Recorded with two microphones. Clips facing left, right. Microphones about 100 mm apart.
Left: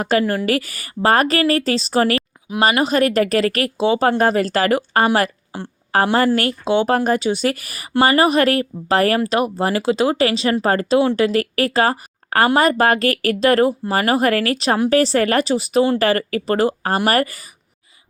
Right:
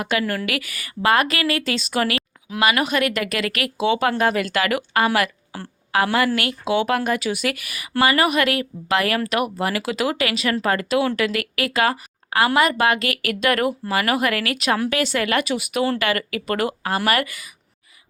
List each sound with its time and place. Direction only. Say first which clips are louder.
0.0 s speech: left 5 dB; 35° left (ahead or behind)